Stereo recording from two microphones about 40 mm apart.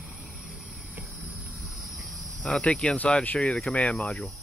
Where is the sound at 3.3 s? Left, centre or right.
Left.